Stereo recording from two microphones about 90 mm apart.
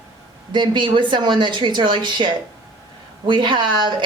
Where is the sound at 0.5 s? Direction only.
60° right (ahead or behind).